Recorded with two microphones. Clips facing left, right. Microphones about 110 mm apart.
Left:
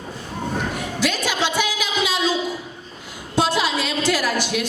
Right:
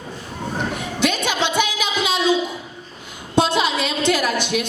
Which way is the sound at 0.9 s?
20° right (ahead or behind).